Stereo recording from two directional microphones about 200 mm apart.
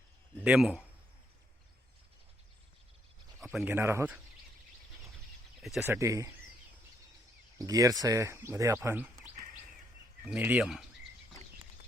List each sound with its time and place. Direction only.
0.4 s speech: 5° right (ahead or behind)
3.4 s a sound: centre (ahead or behind)
3.7 s speech: 10° right (ahead or behind)
5.6 s speech: centre (ahead or behind)
5.9 s speech: 15° right (ahead or behind)
7.6 s speech: 15° right (ahead or behind)
10.2 s speech: 5° right (ahead or behind)